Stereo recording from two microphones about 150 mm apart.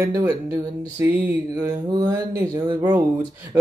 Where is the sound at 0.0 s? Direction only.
15° right (ahead or behind).